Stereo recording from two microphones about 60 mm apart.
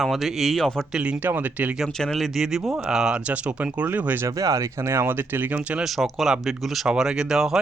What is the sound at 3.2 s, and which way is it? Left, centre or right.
Speech, right.